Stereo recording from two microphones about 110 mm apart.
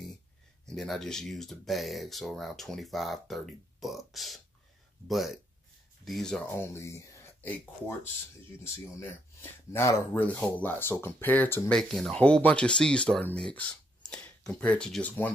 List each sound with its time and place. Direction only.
0.7 s speech: 5° left (ahead or behind)
6.4 s speech: 25° left (ahead or behind)
8.6 s speech: 20° left (ahead or behind)
10.2 s speech: 15° left (ahead or behind)
11.7 s speech: 5° left (ahead or behind)